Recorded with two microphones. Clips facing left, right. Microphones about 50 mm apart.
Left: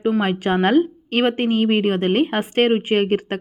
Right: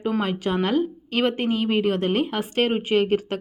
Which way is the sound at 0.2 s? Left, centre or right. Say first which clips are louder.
Left 5 dB; left.